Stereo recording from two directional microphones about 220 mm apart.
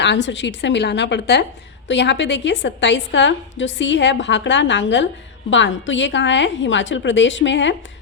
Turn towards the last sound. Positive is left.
turn(degrees=55)  # may be behind; listen again after turning